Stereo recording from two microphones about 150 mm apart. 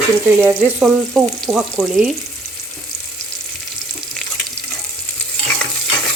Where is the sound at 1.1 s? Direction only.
Centre (ahead or behind).